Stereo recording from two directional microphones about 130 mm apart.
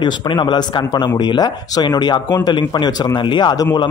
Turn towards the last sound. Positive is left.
turn(degrees=35)  # may be behind; listen again after turning